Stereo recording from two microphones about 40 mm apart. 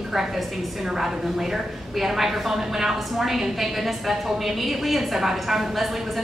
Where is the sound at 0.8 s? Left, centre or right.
Centre.